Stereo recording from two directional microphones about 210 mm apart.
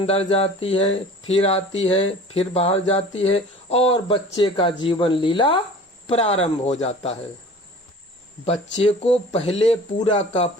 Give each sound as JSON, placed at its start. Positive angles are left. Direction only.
{"t": 0.0, "sound": "speech", "side_deg": 30}
{"t": 8.8, "sound": "speech", "side_deg": 25}